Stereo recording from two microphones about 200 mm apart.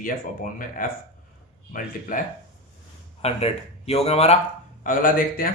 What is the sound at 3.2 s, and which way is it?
Speech, 30° left (ahead or behind).